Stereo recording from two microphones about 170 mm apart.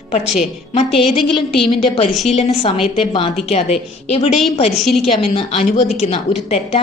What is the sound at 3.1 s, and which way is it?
Speech, 30° left (ahead or behind).